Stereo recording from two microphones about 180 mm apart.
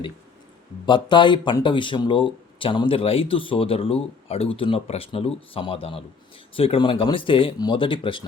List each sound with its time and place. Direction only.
0.9 s speech: 25° left (ahead or behind)